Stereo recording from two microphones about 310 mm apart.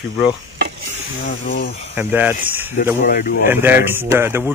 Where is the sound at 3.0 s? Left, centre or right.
Left.